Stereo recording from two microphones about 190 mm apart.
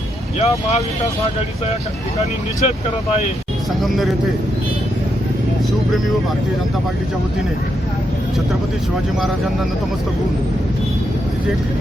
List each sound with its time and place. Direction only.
0.3 s speech: 35° left (ahead or behind)
3.8 s speech: centre (ahead or behind)